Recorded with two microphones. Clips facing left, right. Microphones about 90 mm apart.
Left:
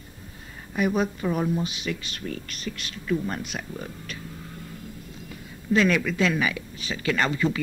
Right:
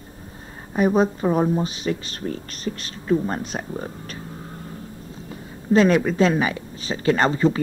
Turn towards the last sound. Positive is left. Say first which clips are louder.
# right 6 dB
turn(degrees=-35)  # may be behind; listen again after turning